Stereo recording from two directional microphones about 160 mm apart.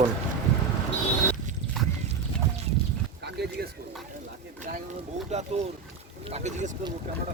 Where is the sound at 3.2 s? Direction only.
90° right.